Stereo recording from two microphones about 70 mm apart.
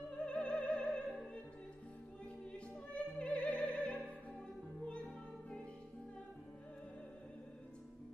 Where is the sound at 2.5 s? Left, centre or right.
Centre.